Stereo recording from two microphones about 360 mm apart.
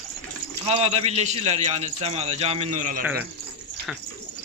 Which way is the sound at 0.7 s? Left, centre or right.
Centre.